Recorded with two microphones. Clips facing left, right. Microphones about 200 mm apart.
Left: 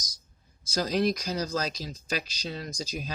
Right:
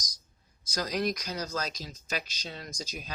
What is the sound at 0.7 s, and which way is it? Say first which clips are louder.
Speech: left 4 dB; 30° left (ahead or behind).